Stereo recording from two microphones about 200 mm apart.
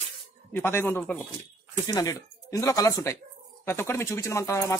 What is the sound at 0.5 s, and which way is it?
Speech, 10° left (ahead or behind).